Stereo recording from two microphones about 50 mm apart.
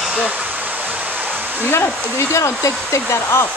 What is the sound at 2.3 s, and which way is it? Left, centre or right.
Speech, left.